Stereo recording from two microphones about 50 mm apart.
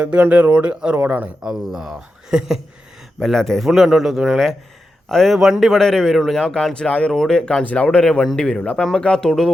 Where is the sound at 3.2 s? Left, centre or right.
Centre.